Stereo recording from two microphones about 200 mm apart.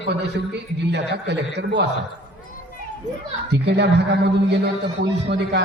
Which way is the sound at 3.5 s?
55° right (ahead or behind).